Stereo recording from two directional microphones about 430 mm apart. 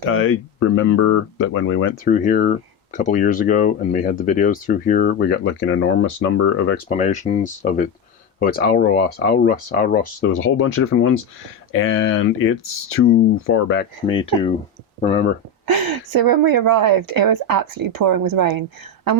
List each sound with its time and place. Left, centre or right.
0.1 s speech: left
14.1 s speech: centre
15.6 s a woman's voice: right